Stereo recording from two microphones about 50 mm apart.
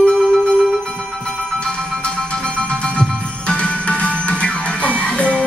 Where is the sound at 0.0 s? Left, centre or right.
Centre.